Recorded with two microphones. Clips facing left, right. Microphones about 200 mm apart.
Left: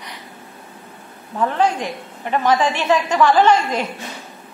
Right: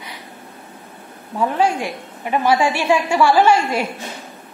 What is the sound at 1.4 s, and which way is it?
A woman's voice, 10° right (ahead or behind).